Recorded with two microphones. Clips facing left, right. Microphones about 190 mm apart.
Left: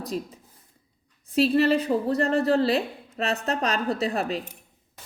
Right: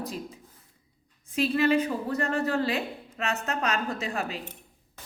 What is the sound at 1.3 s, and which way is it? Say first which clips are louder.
Speech: left 3 dB; 35° left (ahead or behind).